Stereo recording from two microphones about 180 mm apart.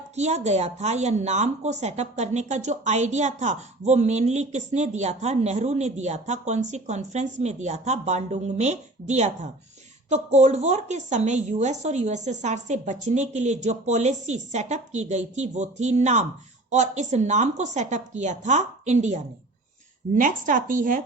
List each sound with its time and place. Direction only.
0.2 s a woman's voice: 40° right (ahead or behind)